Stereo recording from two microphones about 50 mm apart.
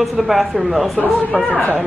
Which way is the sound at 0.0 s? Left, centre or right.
Centre.